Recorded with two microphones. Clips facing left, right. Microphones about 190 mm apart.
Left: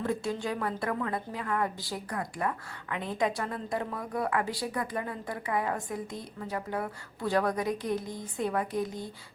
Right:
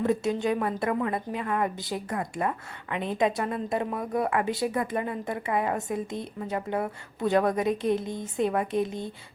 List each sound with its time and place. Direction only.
0.0 s a woman's voice: 20° right (ahead or behind)